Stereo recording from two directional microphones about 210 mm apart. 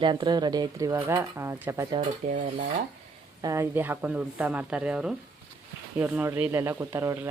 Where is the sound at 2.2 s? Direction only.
40° right (ahead or behind).